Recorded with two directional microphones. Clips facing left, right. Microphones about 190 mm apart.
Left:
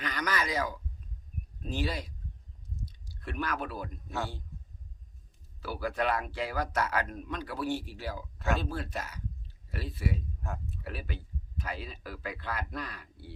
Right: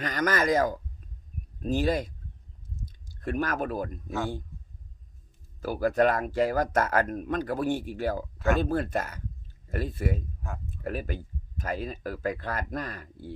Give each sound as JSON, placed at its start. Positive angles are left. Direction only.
{"t": 0.0, "sound": "speech", "side_deg": -45}
{"t": 2.8, "sound": "clicking", "side_deg": -45}
{"t": 5.5, "sound": "speech", "side_deg": -45}